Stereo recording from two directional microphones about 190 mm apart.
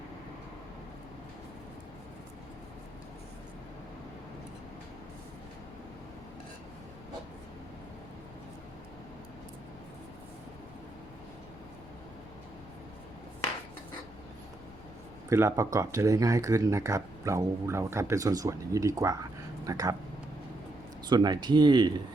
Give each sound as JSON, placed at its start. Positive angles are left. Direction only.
{"t": 15.3, "sound": "speech", "side_deg": -15}
{"t": 21.1, "sound": "speech", "side_deg": -20}